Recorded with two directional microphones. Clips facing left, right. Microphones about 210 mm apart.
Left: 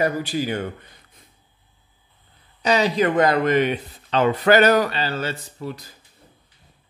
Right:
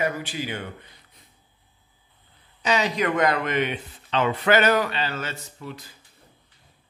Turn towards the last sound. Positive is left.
turn(degrees=40)  # may be behind; listen again after turning